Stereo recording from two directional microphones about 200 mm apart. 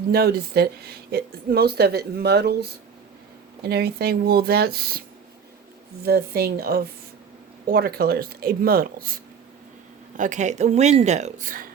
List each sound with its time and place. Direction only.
0.1 s speech: 50° right (ahead or behind)
10.2 s speech: 35° right (ahead or behind)